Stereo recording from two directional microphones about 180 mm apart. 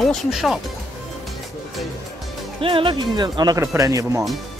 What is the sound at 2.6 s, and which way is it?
Speech, 30° right (ahead or behind).